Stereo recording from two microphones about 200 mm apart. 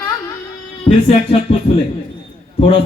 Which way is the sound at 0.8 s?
30° left (ahead or behind).